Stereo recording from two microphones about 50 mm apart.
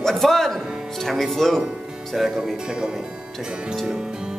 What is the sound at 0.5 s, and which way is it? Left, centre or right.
Music, centre.